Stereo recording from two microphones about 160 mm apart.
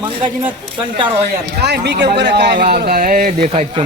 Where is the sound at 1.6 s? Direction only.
90° right; by 3.7 s 60° right (ahead or behind).